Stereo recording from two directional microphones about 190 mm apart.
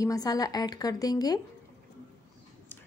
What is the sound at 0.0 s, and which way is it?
Speech, 20° left (ahead or behind).